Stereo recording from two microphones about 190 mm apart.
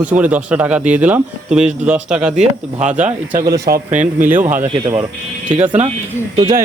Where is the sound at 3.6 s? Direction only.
45° right (ahead or behind).